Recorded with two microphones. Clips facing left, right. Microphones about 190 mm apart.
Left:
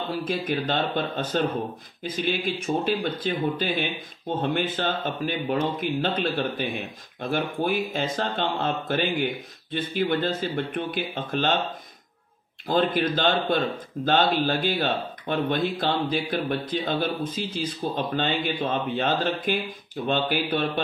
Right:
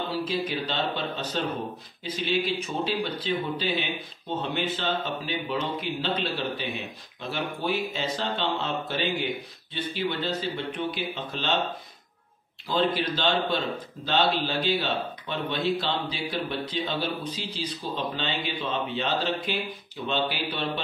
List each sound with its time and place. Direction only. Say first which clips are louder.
0.2 s speech: left 2 dB; 50° left (ahead or behind)
12.6 s speech: left 3 dB; 50° left (ahead or behind)